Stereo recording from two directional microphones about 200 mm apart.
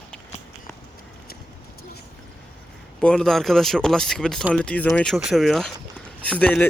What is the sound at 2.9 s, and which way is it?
Speech, 5° left (ahead or behind).